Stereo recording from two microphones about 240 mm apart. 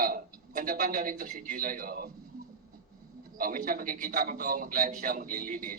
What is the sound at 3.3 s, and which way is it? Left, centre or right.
A man's voice, right.